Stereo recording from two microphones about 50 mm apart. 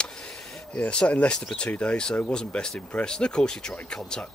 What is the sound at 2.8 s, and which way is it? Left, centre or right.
Speech, left.